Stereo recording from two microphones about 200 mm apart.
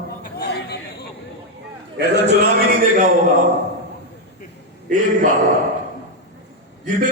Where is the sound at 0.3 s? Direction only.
55° left (ahead or behind).